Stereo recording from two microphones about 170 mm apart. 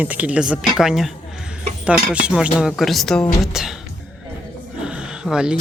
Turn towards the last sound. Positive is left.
turn(degrees=-5)  # may be behind; listen again after turning